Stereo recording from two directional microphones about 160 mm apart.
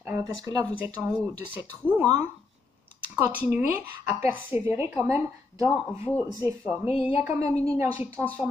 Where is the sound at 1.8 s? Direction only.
10° left (ahead or behind).